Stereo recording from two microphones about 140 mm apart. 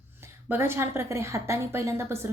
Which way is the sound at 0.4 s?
15° right (ahead or behind).